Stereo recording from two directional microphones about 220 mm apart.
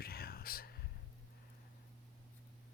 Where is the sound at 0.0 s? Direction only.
45° left (ahead or behind).